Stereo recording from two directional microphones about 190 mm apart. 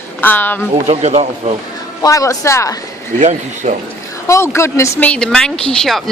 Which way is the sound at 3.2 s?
40° right (ahead or behind).